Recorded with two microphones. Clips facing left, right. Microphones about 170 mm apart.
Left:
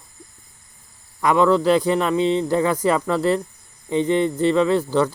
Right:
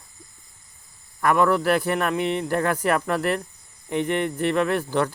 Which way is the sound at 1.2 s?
15° left (ahead or behind).